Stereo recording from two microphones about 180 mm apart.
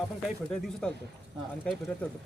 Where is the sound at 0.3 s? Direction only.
5° left (ahead or behind).